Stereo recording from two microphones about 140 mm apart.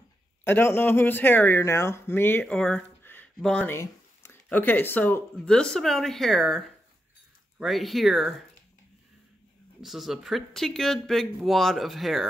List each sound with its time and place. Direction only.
0.4 s speech: 15° left (ahead or behind)
2.4 s a sound: 5° left (ahead or behind)
3.3 s speech: 5° left (ahead or behind)
3.7 s speech: 20° left (ahead or behind); by 8.4 s centre (ahead or behind)
9.8 s speech: centre (ahead or behind)